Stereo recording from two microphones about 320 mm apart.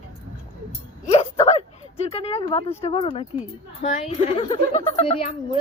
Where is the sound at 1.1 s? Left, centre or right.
Centre.